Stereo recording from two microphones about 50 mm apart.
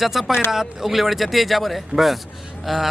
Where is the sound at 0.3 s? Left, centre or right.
Left.